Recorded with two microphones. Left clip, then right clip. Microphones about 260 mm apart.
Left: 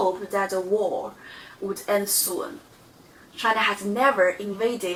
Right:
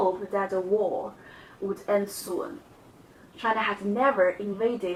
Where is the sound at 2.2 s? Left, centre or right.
Right.